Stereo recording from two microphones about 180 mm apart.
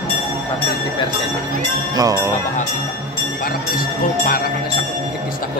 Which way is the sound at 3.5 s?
50° left (ahead or behind).